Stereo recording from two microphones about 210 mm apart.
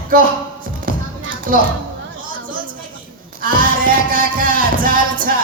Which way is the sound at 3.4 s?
40° right (ahead or behind).